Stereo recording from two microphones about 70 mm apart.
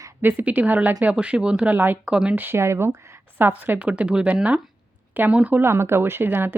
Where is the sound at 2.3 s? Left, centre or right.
Right.